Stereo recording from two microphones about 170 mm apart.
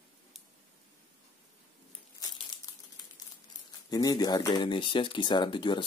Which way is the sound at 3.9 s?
20° left (ahead or behind).